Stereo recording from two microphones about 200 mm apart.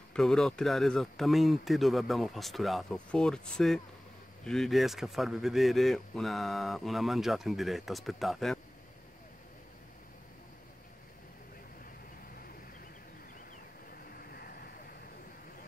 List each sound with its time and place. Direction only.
0.1 s a man's voice: 5° left (ahead or behind)
14.3 s vehicle: 50° left (ahead or behind)